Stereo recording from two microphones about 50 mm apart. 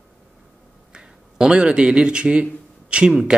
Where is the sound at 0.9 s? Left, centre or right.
Centre.